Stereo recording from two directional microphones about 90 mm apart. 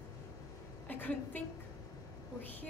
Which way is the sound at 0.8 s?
20° left (ahead or behind).